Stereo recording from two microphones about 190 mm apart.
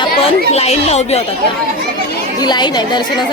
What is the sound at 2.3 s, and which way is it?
Speech, 20° left (ahead or behind).